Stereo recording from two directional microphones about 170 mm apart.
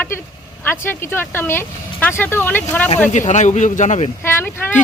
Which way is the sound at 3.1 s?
45° left (ahead or behind).